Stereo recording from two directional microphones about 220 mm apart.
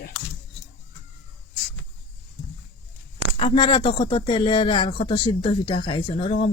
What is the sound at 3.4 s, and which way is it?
Speech, 25° left (ahead or behind).